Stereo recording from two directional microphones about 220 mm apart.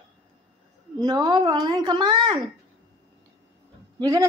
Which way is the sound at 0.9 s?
20° right (ahead or behind).